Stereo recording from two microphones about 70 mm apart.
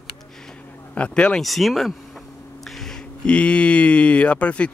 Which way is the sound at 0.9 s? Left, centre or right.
Centre.